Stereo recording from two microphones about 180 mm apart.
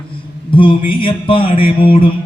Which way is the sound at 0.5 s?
30° left (ahead or behind).